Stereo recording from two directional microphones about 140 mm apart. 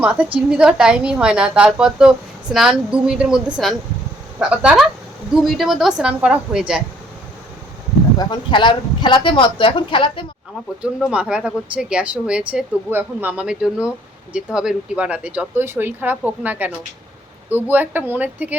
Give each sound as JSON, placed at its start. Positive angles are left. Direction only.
{"t": 0.0, "sound": "a woman's voice", "side_deg": -10}
{"t": 8.2, "sound": "speech", "side_deg": 35}
{"t": 11.1, "sound": "speech", "side_deg": -10}